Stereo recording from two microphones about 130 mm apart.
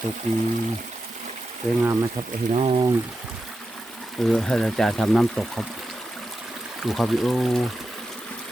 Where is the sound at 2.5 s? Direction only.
50° right (ahead or behind).